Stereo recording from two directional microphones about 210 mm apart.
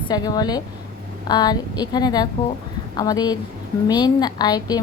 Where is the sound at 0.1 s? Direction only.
20° left (ahead or behind).